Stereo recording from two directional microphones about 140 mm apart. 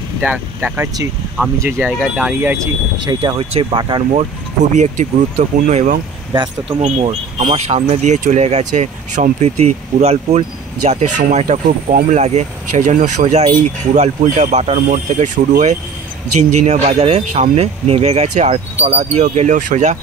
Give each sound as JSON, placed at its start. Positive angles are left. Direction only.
{"t": 0.2, "sound": "speech", "side_deg": -10}
{"t": 2.5, "sound": "speech", "side_deg": -20}
{"t": 3.3, "sound": "speech", "side_deg": -40}
{"t": 4.7, "sound": "speech", "side_deg": -55}
{"t": 14.9, "sound": "speech", "side_deg": -65}
{"t": 16.5, "sound": "speech", "side_deg": -55}